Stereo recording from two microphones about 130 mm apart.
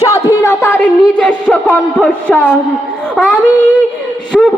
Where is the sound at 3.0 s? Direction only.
5° left (ahead or behind).